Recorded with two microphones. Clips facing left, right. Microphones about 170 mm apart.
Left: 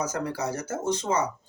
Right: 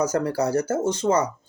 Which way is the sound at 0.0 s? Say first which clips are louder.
Right 7 dB; 35° right (ahead or behind).